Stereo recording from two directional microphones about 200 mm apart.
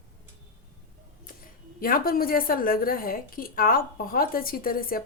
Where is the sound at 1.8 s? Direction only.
45° left (ahead or behind).